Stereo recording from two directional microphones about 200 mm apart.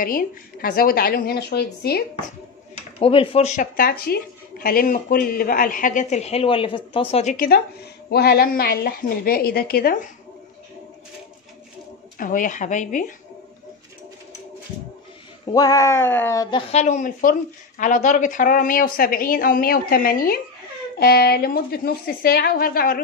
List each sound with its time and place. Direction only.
0.0 s speech: 45° left (ahead or behind)
3.0 s speech: 30° left (ahead or behind)
7.3 s speech: 45° left (ahead or behind)
12.2 s speech: 40° left (ahead or behind)
15.4 s speech: 20° left (ahead or behind)
16.8 s speech: 40° left (ahead or behind)